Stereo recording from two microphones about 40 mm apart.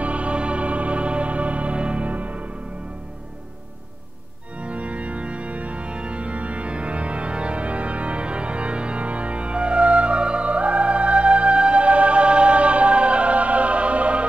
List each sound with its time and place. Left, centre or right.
0.0 s music: right
4.6 s organ: right